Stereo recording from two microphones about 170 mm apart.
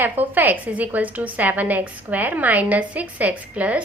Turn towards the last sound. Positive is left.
turn(degrees=-10)  # may be behind; listen again after turning